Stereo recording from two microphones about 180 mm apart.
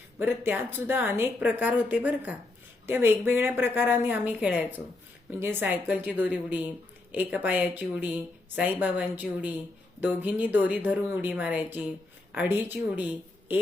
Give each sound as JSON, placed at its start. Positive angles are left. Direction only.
{"t": 0.2, "sound": "speech", "side_deg": -10}